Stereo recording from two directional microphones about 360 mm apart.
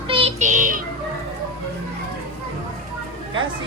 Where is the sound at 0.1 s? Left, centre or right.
Centre.